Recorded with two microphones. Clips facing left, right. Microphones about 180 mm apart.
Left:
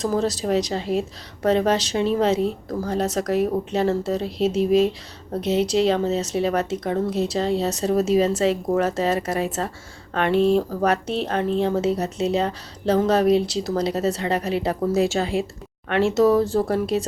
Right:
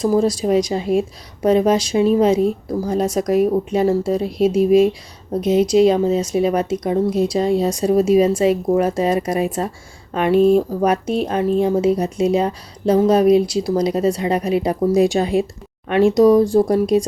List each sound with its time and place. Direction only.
0.0 s speech: 10° right (ahead or behind)